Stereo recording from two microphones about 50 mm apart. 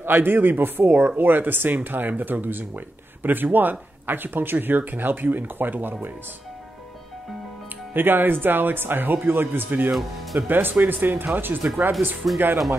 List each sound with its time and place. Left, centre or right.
0.0 s speech: right
7.9 s speech: right
12.2 s speech: centre